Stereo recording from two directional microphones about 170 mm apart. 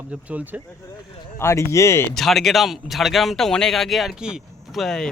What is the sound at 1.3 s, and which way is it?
Speech, 15° left (ahead or behind).